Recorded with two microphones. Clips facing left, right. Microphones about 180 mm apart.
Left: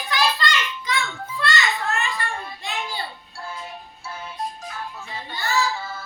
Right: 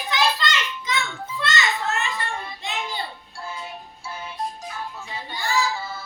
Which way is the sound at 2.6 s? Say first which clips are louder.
Even; 20° right (ahead or behind).